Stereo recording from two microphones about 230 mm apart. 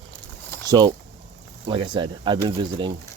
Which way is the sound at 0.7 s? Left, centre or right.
Centre.